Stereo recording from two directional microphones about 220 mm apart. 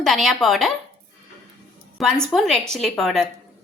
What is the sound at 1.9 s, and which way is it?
A woman's voice, centre (ahead or behind).